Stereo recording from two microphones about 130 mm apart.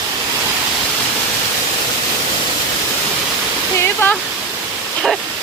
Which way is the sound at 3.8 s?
15° left (ahead or behind).